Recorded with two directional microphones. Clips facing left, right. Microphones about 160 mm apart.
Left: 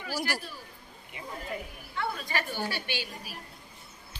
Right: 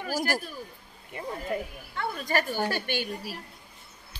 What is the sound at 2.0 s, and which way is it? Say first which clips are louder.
A woman's voice: right 4 dB; 45° right (ahead or behind).